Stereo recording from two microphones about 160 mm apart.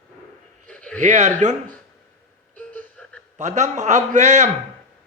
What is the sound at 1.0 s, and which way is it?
Speech, 45° right (ahead or behind).